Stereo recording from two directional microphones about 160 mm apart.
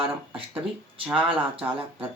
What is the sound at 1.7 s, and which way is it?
Speech, 35° right (ahead or behind).